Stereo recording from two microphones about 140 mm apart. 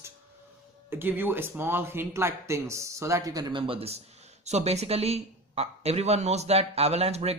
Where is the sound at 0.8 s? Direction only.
15° right (ahead or behind).